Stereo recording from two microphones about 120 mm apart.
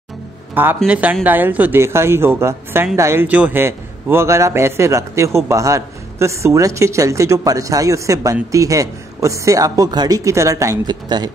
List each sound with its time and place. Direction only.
0.8 s a man's voice: 10° right (ahead or behind); by 11.3 s 35° right (ahead or behind)